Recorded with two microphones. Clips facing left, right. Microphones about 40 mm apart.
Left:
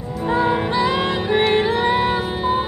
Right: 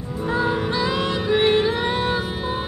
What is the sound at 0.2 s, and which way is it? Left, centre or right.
Music, centre.